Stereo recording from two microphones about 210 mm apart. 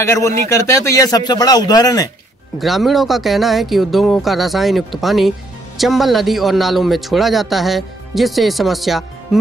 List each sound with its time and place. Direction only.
0.0 s a man's voice: 15° left (ahead or behind)
2.6 s a man's voice: centre (ahead or behind)